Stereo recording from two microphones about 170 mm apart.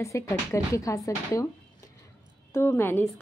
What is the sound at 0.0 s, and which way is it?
Speech, 15° left (ahead or behind).